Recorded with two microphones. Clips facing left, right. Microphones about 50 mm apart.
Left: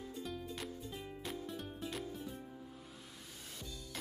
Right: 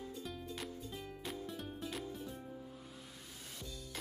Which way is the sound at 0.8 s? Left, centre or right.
Centre.